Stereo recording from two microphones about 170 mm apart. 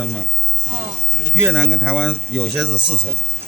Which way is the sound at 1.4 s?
10° right (ahead or behind).